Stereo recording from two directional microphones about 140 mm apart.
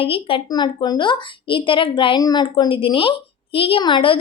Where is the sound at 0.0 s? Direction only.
40° left (ahead or behind).